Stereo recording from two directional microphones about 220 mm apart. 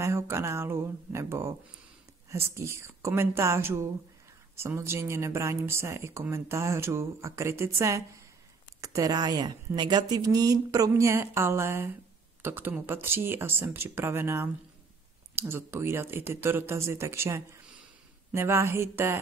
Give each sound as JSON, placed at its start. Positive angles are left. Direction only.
{"t": 0.0, "sound": "speech", "side_deg": -15}
{"t": 2.5, "sound": "speech", "side_deg": -10}